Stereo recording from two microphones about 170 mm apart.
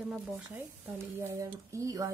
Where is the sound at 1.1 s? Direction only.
15° right (ahead or behind).